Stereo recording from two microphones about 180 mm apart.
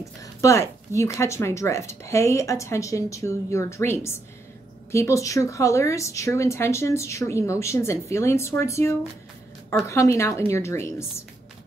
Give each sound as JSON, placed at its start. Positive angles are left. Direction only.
{"t": 0.2, "sound": "speech", "side_deg": 15}